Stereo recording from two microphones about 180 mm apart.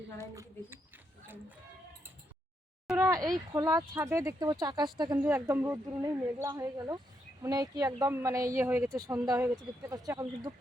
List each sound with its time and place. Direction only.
0.2 s speech: 15° right (ahead or behind)
2.8 s a sound: 5° right (ahead or behind)
3.5 s speech: 15° right (ahead or behind)